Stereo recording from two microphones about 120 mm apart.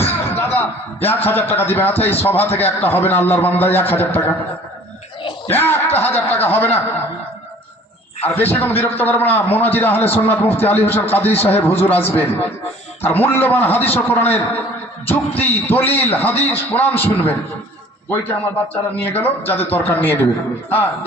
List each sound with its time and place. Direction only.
0.0 s a sound: 20° left (ahead or behind)
1.5 s a man's voice: 15° left (ahead or behind)
5.5 s a man's voice: 20° left (ahead or behind)
8.3 s a man's voice: 15° left (ahead or behind)
18.9 s a man's voice: 15° left (ahead or behind)